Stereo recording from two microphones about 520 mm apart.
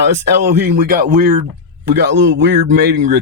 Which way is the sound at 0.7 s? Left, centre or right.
Centre.